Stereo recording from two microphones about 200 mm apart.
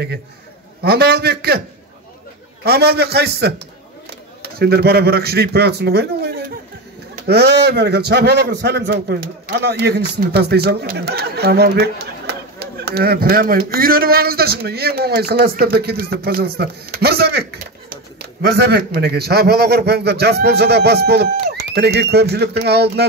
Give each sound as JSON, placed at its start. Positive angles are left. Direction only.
{"t": 0.8, "sound": "a man's voice", "side_deg": -50}
{"t": 2.6, "sound": "a man's voice", "side_deg": -50}